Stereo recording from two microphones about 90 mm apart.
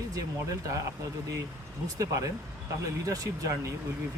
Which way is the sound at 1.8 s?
40° right (ahead or behind).